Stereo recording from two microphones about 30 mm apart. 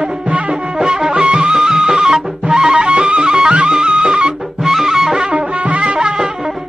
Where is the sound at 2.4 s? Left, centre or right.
Right.